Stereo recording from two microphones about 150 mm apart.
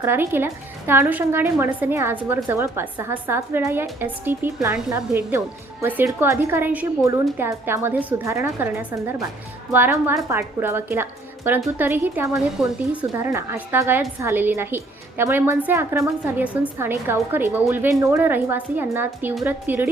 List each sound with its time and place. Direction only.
0.0 s a woman's voice: 15° right (ahead or behind)